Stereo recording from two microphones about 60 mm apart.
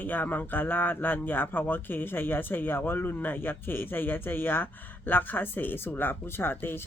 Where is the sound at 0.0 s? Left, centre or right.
Left.